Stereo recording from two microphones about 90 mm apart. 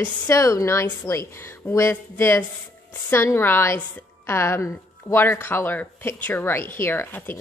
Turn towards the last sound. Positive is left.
turn(degrees=25)  # may be behind; listen again after turning